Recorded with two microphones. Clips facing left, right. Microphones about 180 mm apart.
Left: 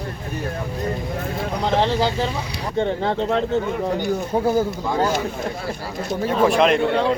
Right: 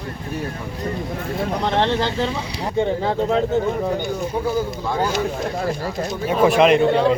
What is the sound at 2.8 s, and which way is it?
Speech, 5° right (ahead or behind).